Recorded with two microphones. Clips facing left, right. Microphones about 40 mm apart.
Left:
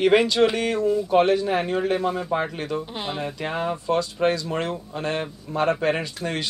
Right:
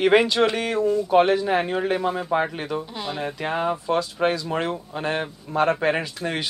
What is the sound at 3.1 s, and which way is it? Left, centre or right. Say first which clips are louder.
Speech: right 3 dB; centre.